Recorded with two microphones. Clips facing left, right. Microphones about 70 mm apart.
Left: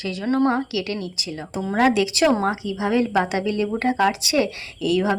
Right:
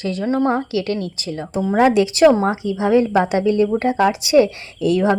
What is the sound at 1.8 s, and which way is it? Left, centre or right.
A woman's voice, right.